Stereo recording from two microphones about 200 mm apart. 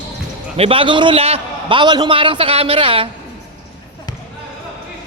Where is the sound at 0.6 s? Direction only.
30° right (ahead or behind).